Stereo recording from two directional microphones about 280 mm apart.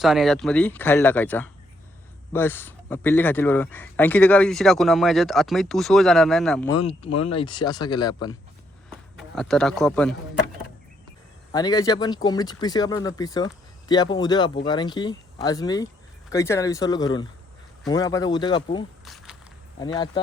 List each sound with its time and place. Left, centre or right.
0.0 s speech: centre
6.7 s speech: centre
8.9 s speech: centre
11.5 s speech: centre
19.0 s a sound: centre
19.8 s speech: centre